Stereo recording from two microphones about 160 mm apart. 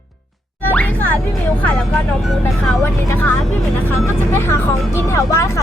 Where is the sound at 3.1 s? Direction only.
15° left (ahead or behind).